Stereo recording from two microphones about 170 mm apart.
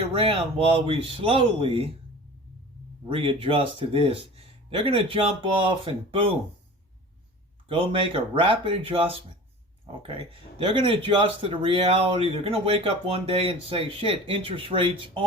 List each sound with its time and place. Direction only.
0.0 s speech: 30° right (ahead or behind)
3.1 s speech: 30° right (ahead or behind)
7.7 s speech: 30° right (ahead or behind)
10.6 s speech: 30° right (ahead or behind)